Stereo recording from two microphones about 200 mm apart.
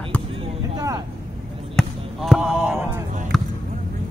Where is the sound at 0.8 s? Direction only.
20° right (ahead or behind).